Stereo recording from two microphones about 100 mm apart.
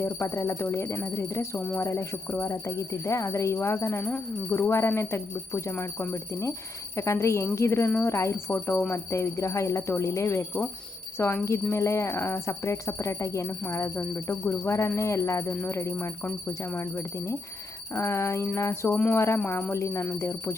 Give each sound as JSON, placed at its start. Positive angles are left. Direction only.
{"t": 0.0, "sound": "speech", "side_deg": 25}
{"t": 4.0, "sound": "speech", "side_deg": 10}
{"t": 4.5, "sound": "speech", "side_deg": 25}